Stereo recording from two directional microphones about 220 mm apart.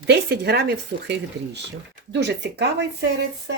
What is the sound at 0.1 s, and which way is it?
Speech, 50° right (ahead or behind).